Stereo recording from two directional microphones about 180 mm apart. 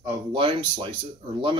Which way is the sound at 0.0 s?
25° right (ahead or behind).